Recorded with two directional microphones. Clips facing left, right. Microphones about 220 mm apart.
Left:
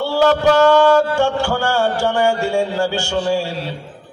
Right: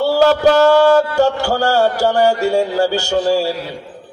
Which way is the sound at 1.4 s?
40° right (ahead or behind).